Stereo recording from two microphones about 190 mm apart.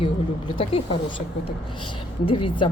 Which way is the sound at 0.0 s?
25° left (ahead or behind).